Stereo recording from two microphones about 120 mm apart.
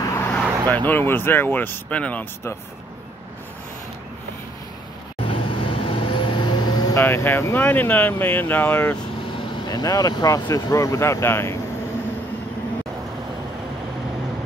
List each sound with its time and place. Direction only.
0.0 s vehicle: 20° left (ahead or behind)
0.8 s speech: 15° left (ahead or behind)
5.3 s vehicle: 45° left (ahead or behind)
7.0 s speech: 20° left (ahead or behind)
9.7 s speech: 30° left (ahead or behind)